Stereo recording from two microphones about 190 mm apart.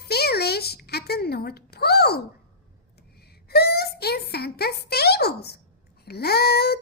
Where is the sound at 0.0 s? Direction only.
55° left (ahead or behind).